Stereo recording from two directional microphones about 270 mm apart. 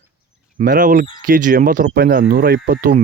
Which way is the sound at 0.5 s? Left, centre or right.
Right.